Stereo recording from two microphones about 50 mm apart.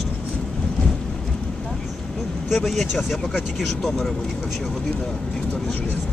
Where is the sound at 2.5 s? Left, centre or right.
Centre.